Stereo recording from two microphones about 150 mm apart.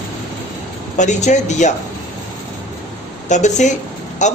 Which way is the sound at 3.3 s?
50° left (ahead or behind).